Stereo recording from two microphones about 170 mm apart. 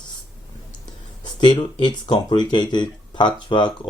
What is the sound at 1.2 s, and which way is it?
Speech, 25° left (ahead or behind).